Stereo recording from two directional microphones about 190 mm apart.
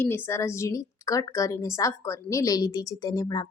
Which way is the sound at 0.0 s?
10° left (ahead or behind).